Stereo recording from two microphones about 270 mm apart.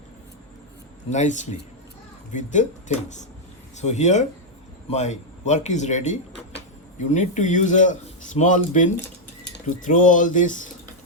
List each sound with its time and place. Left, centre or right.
1.1 s a man's voice: left